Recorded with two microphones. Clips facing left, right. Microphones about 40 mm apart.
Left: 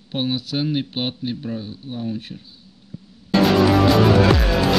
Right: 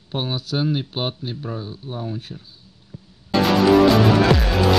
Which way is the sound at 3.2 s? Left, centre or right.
Centre.